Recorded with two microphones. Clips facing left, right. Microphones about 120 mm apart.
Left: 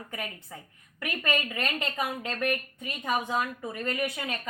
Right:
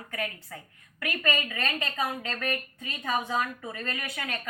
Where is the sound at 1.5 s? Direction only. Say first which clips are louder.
Even; 15° left (ahead or behind).